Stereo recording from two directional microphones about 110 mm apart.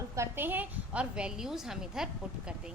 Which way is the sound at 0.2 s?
20° right (ahead or behind).